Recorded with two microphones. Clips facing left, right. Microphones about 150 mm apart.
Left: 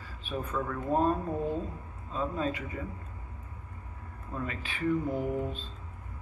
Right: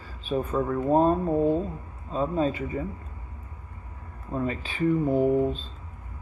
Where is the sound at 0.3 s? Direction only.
25° right (ahead or behind).